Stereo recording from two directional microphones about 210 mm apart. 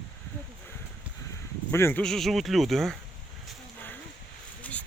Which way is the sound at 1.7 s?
10° left (ahead or behind).